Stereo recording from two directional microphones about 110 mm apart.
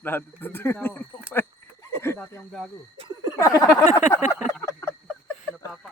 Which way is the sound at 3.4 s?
30° left (ahead or behind).